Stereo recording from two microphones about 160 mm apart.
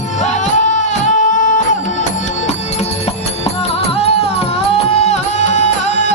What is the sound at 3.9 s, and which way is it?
Music, 40° left (ahead or behind).